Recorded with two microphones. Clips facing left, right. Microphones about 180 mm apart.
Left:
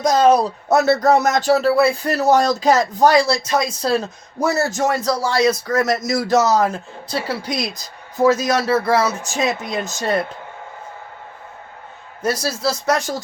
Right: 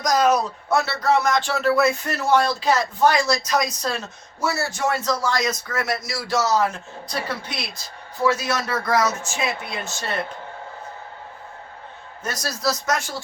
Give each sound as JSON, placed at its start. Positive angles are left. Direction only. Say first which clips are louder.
{"t": 0.0, "sound": "speech", "louder": "left 5 dB", "side_deg": 30}
{"t": 12.2, "sound": "speech", "louder": "left 5 dB", "side_deg": 30}